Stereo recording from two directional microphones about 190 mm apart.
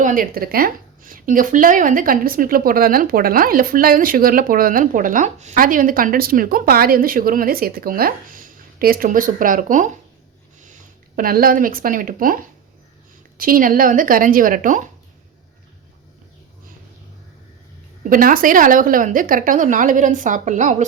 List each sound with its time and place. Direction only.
0.0 s speech: 45° right (ahead or behind)
18.1 s speech: 50° right (ahead or behind)